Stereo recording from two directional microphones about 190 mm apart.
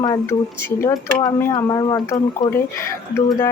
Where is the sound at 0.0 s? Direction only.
20° left (ahead or behind).